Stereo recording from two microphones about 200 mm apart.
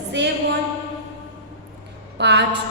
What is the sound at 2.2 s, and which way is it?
Speech, 55° right (ahead or behind).